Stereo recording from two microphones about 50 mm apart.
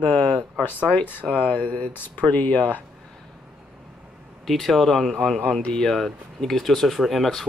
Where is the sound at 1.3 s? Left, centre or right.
Left.